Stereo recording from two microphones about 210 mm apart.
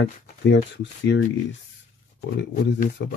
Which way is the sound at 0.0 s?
55° left (ahead or behind).